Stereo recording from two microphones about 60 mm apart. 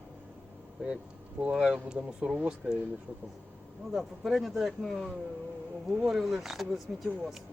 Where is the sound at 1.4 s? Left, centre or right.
Centre.